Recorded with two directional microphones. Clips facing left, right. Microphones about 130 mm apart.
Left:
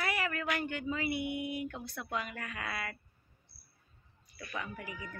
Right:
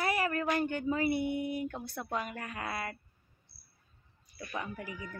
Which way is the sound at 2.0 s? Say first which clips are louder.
Right 1 dB; 35° right (ahead or behind).